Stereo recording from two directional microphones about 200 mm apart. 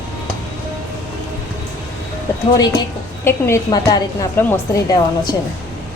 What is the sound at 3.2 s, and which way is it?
A woman's voice, 15° left (ahead or behind).